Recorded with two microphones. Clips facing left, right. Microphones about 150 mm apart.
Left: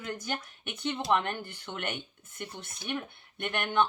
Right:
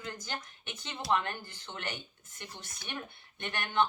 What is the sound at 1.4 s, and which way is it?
Speech, 60° left (ahead or behind).